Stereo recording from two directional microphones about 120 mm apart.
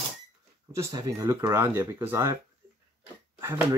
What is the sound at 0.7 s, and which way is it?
Speech, 25° right (ahead or behind).